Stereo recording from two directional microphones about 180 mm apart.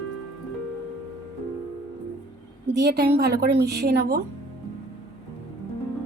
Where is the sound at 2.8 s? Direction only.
65° right (ahead or behind).